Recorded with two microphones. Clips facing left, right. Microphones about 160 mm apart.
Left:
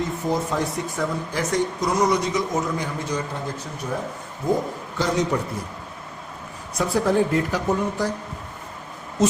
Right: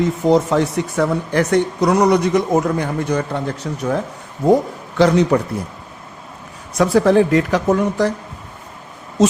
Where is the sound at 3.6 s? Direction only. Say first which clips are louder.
Right 8 dB; 70° right (ahead or behind).